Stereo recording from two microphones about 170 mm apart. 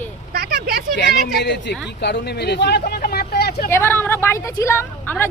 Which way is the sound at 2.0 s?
80° left.